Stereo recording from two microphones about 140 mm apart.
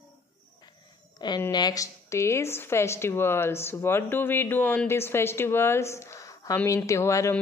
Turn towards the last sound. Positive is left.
turn(degrees=20)  # may be behind; listen again after turning